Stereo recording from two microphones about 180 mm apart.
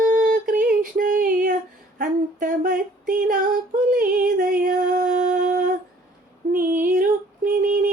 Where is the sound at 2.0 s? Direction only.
50° right (ahead or behind).